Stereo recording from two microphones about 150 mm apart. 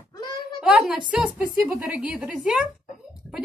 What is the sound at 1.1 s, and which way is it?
A woman's voice, 10° right (ahead or behind).